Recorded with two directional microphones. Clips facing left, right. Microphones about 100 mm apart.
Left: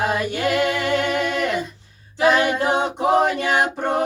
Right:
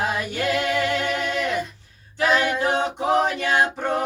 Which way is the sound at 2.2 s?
20° left (ahead or behind).